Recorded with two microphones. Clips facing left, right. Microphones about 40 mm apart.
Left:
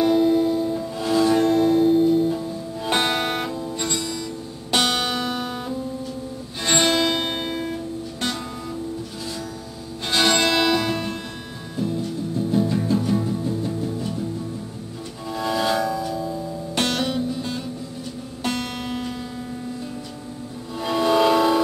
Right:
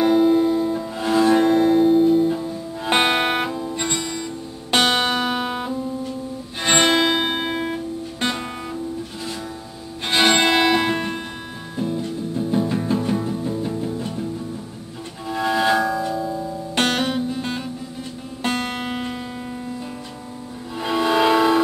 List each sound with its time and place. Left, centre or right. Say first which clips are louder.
0.0 s music: right 2 dB; centre
2.8 s music: right 4 dB; right
10.0 s music: right 3 dB; right
15.2 s music: right 3 dB; right
16.7 s music: right 2 dB; right
20.7 s music: even; centre